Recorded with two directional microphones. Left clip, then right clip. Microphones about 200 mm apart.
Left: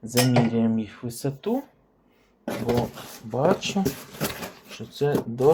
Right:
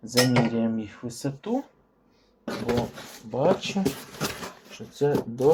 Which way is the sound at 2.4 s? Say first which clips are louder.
Left 2 dB; 5° left (ahead or behind).